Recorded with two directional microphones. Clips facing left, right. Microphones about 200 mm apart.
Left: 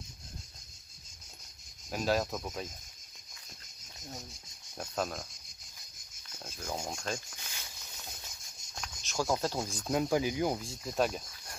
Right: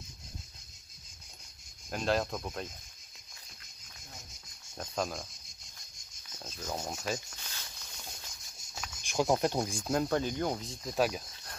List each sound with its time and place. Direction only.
1.9 s speech: centre (ahead or behind)
4.7 s speech: centre (ahead or behind)
6.3 s cricket: 10° left (ahead or behind)
6.9 s speech: 5° right (ahead or behind)
7.3 s snake: 10° left (ahead or behind)
9.0 s speech: 20° right (ahead or behind)
9.8 s speech: 5° left (ahead or behind)
10.7 s speech: centre (ahead or behind)